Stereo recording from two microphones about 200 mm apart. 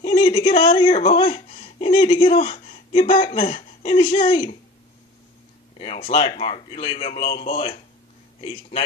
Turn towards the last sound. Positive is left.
turn(degrees=30)  # may be behind; listen again after turning